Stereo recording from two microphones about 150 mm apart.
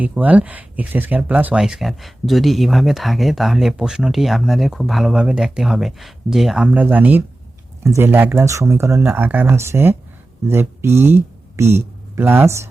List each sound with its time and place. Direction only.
0.0 s speech: 10° right (ahead or behind)